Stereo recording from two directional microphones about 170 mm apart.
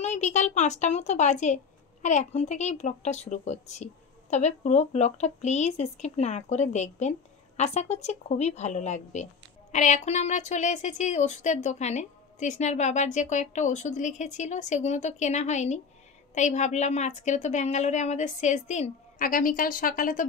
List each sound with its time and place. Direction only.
0.0 s a woman's voice: 45° left (ahead or behind)